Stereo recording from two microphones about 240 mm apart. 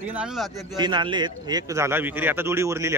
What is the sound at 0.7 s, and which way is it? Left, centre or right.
A man's voice, centre.